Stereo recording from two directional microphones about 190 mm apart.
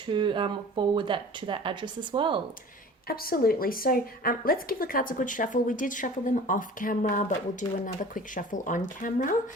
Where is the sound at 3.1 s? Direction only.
50° left (ahead or behind).